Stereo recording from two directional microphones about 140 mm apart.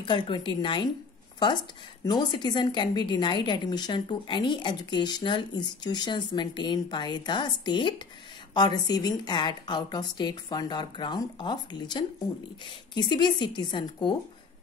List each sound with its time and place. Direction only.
0.0 s a woman's voice: 35° left (ahead or behind)
2.0 s a woman's voice: 30° left (ahead or behind)